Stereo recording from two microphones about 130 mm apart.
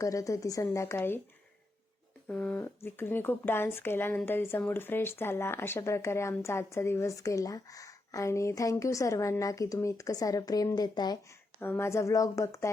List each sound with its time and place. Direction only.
0.0 s speech: 25° left (ahead or behind)
2.2 s speech: 10° left (ahead or behind); by 11.2 s 30° left (ahead or behind)
11.6 s speech: 20° left (ahead or behind)